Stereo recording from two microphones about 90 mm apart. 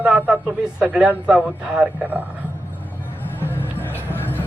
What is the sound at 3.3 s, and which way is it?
Music, 25° left (ahead or behind).